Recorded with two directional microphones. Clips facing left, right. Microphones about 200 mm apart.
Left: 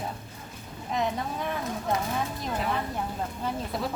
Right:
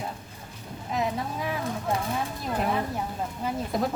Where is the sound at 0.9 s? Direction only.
Centre (ahead or behind).